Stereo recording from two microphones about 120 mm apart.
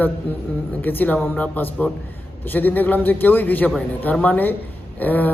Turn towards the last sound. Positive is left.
turn(degrees=15)  # may be behind; listen again after turning